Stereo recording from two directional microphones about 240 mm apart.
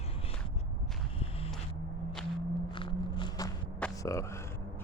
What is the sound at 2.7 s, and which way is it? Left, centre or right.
Walk, left.